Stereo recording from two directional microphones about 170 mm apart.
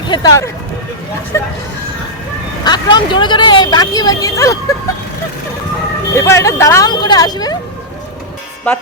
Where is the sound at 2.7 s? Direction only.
25° left (ahead or behind).